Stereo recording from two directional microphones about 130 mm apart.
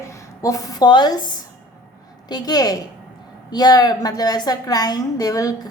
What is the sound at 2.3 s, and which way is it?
A woman's voice, 30° left (ahead or behind).